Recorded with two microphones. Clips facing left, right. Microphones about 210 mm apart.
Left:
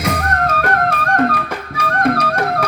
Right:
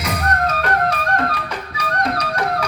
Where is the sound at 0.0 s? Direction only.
50° left (ahead or behind).